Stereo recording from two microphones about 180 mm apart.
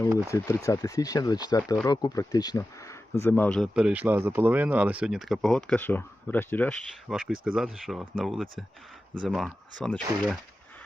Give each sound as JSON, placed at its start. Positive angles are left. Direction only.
{"t": 0.3, "sound": "speech", "side_deg": 15}
{"t": 7.1, "sound": "speech", "side_deg": -5}